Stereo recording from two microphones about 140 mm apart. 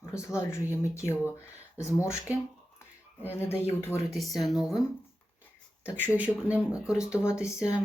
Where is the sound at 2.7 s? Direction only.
15° left (ahead or behind).